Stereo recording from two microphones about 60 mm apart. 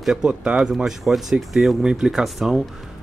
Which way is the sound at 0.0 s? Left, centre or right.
Centre.